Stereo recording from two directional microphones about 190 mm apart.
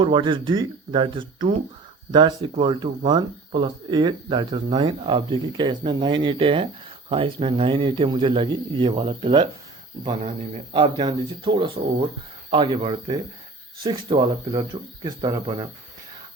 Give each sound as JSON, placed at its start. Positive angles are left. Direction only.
{"t": 0.0, "sound": "speech", "side_deg": -25}